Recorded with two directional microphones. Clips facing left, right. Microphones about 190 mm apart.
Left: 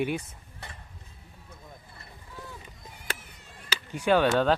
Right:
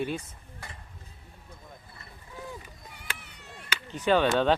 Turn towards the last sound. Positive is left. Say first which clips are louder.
# left 1 dB
turn(degrees=10)  # may be behind; listen again after turning